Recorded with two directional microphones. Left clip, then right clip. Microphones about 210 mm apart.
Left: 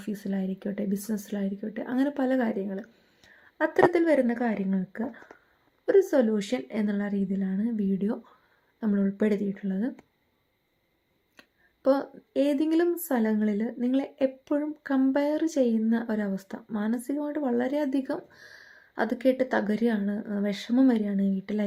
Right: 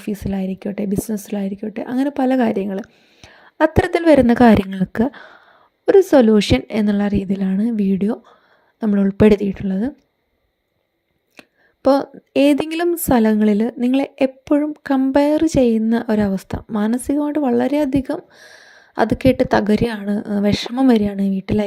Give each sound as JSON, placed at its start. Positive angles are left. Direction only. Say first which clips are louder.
{"t": 0.0, "sound": "a woman's voice", "louder": "right 9 dB", "side_deg": -30}
{"t": 11.3, "sound": "a woman's voice", "louder": "right 11 dB", "side_deg": -35}